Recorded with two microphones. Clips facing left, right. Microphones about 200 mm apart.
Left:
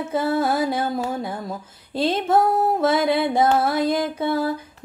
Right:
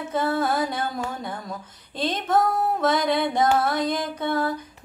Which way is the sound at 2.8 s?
10° left (ahead or behind).